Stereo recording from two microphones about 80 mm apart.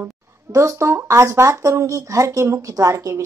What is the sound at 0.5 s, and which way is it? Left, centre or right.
A woman's voice, right.